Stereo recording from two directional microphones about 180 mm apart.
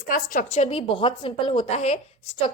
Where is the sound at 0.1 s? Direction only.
50° left (ahead or behind).